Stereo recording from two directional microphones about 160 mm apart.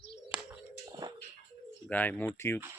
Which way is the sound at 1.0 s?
25° right (ahead or behind).